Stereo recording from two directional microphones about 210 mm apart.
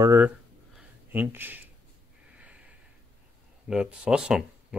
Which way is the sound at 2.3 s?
5° right (ahead or behind).